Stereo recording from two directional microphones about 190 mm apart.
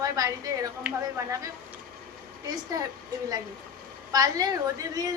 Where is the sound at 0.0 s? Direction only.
20° right (ahead or behind).